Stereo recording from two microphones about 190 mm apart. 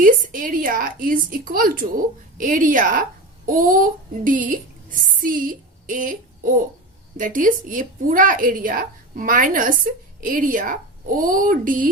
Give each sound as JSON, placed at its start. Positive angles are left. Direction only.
{"t": 0.0, "sound": "a woman's voice", "side_deg": -45}